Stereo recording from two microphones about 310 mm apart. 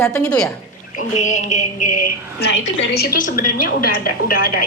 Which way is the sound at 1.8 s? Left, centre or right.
Left.